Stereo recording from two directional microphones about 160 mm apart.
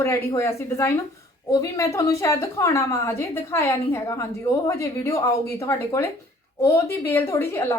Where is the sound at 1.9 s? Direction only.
20° left (ahead or behind).